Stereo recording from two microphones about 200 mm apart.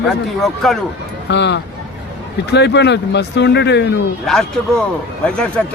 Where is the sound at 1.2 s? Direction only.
60° left (ahead or behind).